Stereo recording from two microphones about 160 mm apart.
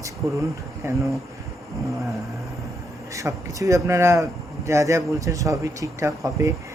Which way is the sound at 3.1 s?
20° right (ahead or behind).